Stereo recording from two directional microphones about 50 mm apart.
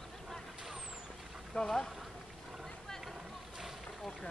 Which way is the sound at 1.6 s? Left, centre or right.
Centre.